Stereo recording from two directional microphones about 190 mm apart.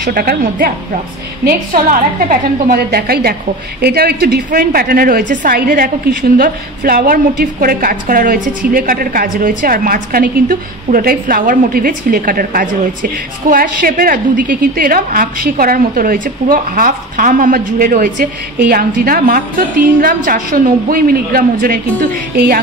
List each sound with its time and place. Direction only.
0.0 s a woman's voice: 50° right (ahead or behind)